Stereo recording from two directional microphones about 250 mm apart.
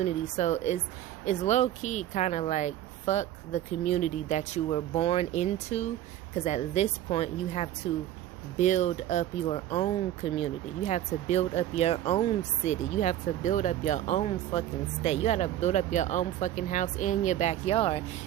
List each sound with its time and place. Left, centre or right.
0.0 s speech: left